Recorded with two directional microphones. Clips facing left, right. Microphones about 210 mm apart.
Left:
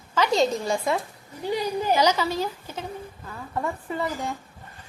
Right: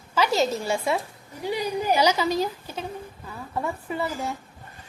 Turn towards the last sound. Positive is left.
turn(degrees=-5)  # may be behind; listen again after turning